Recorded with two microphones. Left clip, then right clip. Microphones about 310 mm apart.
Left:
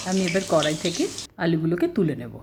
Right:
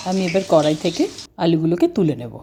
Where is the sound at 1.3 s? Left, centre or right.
Centre.